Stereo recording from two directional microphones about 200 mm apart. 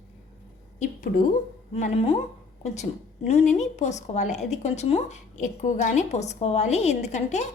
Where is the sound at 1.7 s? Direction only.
35° left (ahead or behind).